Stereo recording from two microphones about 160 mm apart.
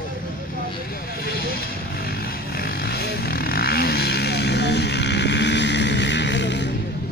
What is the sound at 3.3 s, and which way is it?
Vehicle, 70° left (ahead or behind).